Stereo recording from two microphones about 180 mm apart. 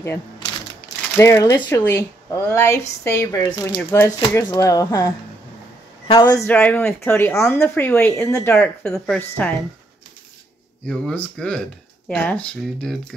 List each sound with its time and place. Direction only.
0.4 s a sound: 25° left (ahead or behind)
1.1 s speech: 15° left (ahead or behind)
6.4 s speech: 5° left (ahead or behind)
8.5 s a woman's voice: 5° left (ahead or behind)
10.9 s a woman's voice: 5° left (ahead or behind)